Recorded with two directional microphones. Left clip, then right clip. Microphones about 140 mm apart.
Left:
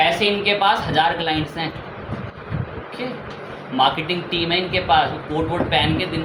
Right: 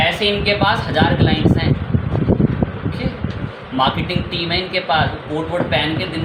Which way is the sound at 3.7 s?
15° left (ahead or behind).